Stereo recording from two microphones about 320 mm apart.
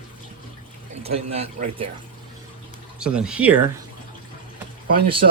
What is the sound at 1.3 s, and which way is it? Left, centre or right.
Speech, centre.